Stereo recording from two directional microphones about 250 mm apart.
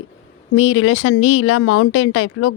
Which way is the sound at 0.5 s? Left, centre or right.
Left.